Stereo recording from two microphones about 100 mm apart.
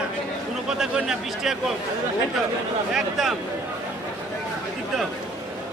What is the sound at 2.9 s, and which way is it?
Speech, 5° right (ahead or behind).